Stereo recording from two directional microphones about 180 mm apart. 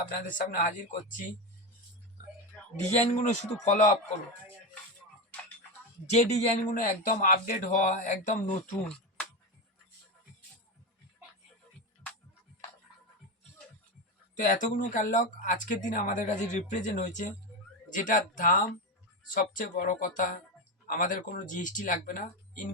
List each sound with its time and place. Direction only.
0.2 s speech: 45° left (ahead or behind)
2.9 s speech: 40° left (ahead or behind)
6.1 s speech: 40° left (ahead or behind)
14.3 s speech: 45° left (ahead or behind)